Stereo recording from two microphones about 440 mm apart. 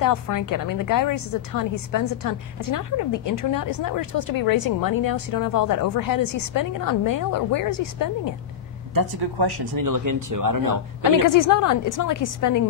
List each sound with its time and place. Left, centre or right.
0.0 s a woman's voice: left
8.9 s speech: right
11.2 s a woman's voice: left